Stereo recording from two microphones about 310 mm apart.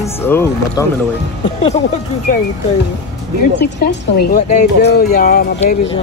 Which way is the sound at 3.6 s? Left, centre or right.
Left.